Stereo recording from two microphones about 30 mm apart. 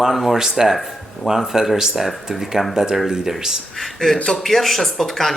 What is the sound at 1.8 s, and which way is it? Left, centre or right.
Speech, centre.